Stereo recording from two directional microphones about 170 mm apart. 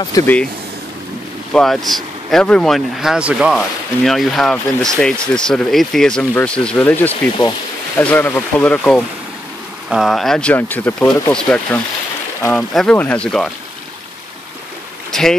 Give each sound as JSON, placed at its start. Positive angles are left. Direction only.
{"t": 0.1, "sound": "speech", "side_deg": 10}
{"t": 1.5, "sound": "speech", "side_deg": 0}
{"t": 15.0, "sound": "a sound", "side_deg": 5}